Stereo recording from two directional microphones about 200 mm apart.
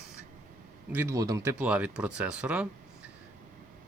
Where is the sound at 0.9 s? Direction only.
15° right (ahead or behind).